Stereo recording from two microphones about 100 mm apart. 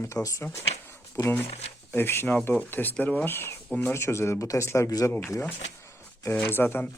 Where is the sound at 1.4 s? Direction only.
90° left.